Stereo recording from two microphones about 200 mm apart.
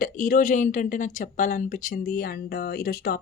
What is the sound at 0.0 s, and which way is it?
Speech, 40° left (ahead or behind).